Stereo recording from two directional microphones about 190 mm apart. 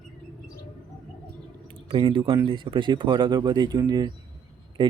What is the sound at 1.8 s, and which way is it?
Speech, 25° right (ahead or behind).